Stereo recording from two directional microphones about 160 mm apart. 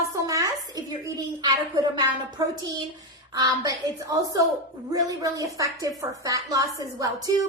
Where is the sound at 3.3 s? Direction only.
25° right (ahead or behind).